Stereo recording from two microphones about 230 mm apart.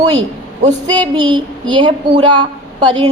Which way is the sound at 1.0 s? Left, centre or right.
Centre.